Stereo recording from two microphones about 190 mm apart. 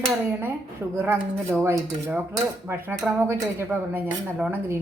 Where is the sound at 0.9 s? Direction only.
10° right (ahead or behind).